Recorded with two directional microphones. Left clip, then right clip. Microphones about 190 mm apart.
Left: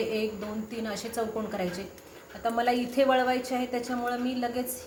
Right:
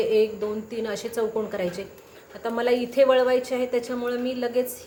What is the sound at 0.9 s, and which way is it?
A woman's voice, 50° right (ahead or behind).